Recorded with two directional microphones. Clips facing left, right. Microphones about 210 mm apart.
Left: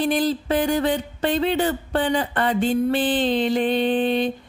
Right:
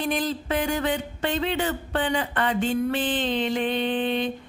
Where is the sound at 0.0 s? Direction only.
35° left (ahead or behind).